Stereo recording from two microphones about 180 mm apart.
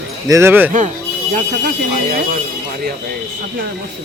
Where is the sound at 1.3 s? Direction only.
45° right (ahead or behind).